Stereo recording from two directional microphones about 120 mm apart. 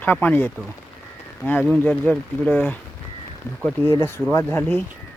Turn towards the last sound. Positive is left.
turn(degrees=15)  # may be behind; listen again after turning